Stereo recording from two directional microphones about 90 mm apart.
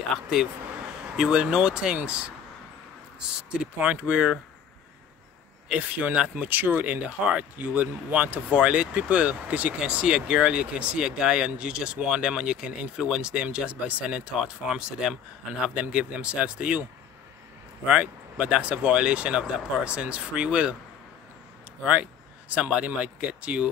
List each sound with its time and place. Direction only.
0.1 s speech: centre (ahead or behind)
3.5 s speech: 10° right (ahead or behind)
5.7 s speech: 15° right (ahead or behind)
17.8 s speech: 10° right (ahead or behind)
21.8 s speech: 10° right (ahead or behind)